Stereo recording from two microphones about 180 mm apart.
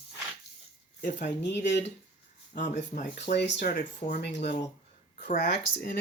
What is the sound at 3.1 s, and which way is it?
Speech, 70° left (ahead or behind).